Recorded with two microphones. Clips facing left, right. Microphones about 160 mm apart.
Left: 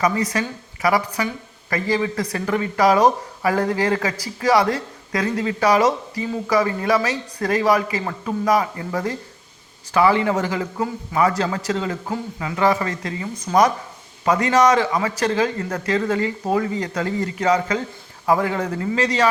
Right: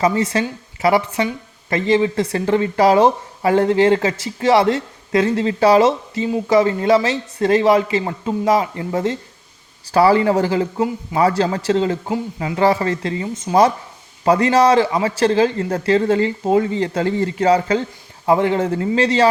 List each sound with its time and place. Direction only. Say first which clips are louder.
0.0 s speech: right 3 dB; 25° right (ahead or behind)
9.9 s speech: right 4 dB; 35° right (ahead or behind)